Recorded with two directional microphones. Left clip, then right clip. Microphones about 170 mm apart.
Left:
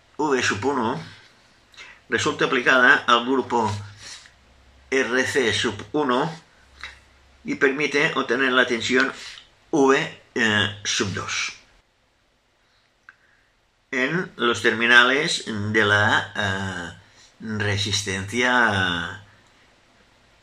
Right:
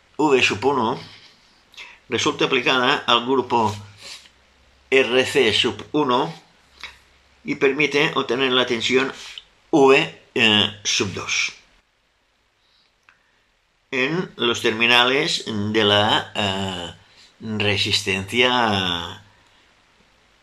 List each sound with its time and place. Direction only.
0.2 s speech: 15° right (ahead or behind)
7.4 s speech: 15° right (ahead or behind)
13.8 s speech: 15° right (ahead or behind)